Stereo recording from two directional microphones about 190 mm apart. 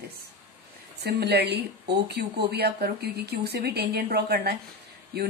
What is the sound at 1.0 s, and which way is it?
Speech, 60° right (ahead or behind).